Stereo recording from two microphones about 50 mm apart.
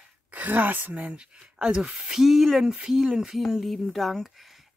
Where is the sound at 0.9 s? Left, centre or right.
Right.